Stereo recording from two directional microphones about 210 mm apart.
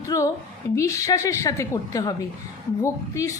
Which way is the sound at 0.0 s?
15° left (ahead or behind).